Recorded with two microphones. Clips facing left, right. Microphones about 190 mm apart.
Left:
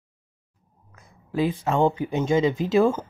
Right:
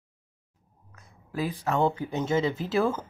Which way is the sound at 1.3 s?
25° left (ahead or behind).